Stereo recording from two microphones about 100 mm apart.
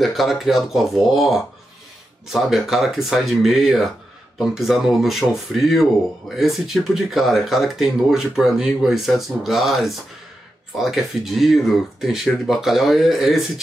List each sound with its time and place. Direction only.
0.0 s speech: centre (ahead or behind)